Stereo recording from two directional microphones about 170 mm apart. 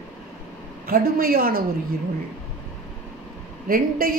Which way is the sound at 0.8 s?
60° right (ahead or behind).